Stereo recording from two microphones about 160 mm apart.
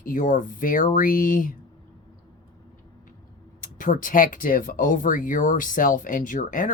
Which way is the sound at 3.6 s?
55° left (ahead or behind).